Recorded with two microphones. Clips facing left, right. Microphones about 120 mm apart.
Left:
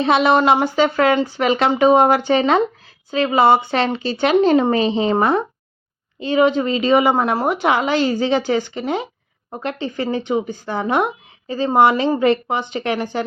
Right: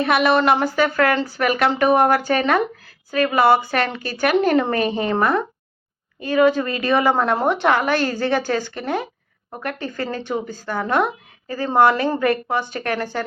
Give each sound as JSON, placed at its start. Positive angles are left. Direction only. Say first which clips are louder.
{"t": 0.0, "sound": "a woman's voice", "louder": "left 2 dB", "side_deg": 25}